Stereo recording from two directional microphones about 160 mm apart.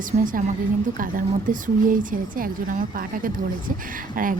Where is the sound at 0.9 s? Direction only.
60° right (ahead or behind).